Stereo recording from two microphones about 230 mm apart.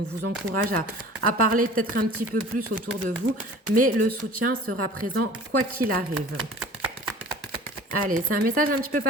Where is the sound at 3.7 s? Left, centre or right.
Right.